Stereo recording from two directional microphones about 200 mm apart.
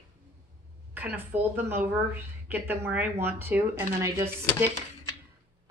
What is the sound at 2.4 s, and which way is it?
Speech, 10° right (ahead or behind).